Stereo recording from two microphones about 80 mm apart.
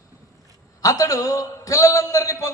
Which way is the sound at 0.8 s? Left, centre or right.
Left.